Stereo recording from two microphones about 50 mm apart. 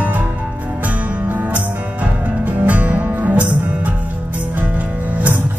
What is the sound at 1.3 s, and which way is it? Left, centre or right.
Music, right.